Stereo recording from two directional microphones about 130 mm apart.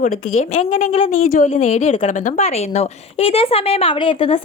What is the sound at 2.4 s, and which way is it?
A woman's voice, 50° left (ahead or behind).